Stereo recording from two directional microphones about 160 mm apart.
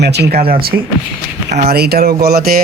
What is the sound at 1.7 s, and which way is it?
Speech, 80° right.